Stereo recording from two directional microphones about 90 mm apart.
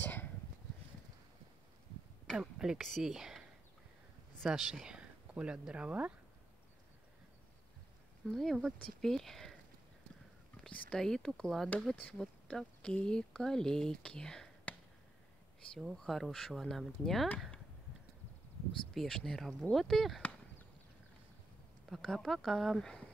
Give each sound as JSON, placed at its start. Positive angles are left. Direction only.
{"t": 0.0, "sound": "a sound", "side_deg": 20}
{"t": 2.3, "sound": "speech", "side_deg": -5}
{"t": 8.3, "sound": "speech", "side_deg": 5}
{"t": 10.6, "sound": "speech", "side_deg": 10}
{"t": 15.8, "sound": "speech", "side_deg": 0}
{"t": 18.9, "sound": "speech", "side_deg": 5}
{"t": 21.8, "sound": "speech", "side_deg": 0}